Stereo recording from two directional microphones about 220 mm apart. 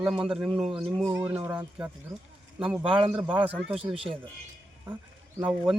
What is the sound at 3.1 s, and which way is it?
Speech, 5° right (ahead or behind).